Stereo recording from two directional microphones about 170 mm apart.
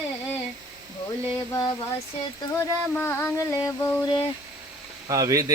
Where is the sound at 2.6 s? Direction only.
15° left (ahead or behind).